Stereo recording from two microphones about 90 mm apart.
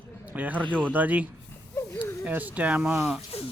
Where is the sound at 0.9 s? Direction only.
15° right (ahead or behind).